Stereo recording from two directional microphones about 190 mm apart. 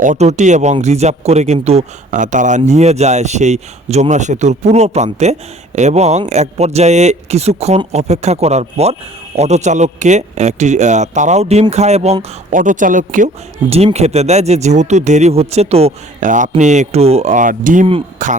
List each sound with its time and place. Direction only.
0.0 s a man's voice: 40° right (ahead or behind)